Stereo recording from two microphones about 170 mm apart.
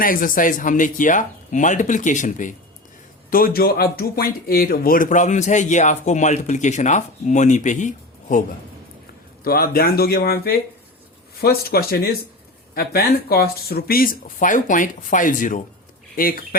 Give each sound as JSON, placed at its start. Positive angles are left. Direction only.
{"t": 0.0, "sound": "speech", "side_deg": 55}
{"t": 3.2, "sound": "speech", "side_deg": 60}
{"t": 9.4, "sound": "speech", "side_deg": 60}